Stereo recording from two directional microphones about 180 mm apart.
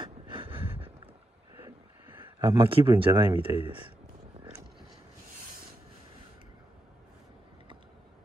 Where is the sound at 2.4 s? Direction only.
20° right (ahead or behind).